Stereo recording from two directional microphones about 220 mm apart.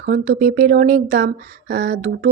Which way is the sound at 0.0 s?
40° right (ahead or behind).